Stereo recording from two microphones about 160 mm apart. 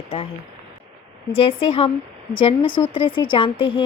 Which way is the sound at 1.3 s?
35° left (ahead or behind).